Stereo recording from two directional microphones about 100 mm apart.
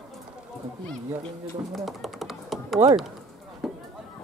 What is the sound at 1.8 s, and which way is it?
Typing, centre (ahead or behind).